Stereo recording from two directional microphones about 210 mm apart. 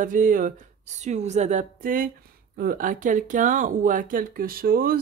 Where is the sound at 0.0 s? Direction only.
40° right (ahead or behind).